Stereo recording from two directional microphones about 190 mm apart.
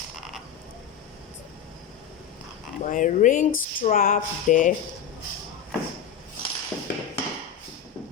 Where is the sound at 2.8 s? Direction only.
40° left (ahead or behind).